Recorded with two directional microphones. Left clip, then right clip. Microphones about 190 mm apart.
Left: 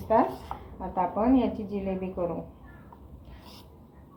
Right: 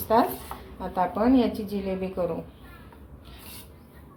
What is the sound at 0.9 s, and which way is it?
A woman's voice, 20° right (ahead or behind).